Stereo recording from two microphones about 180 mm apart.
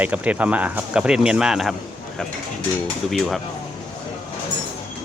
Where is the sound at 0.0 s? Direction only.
10° right (ahead or behind).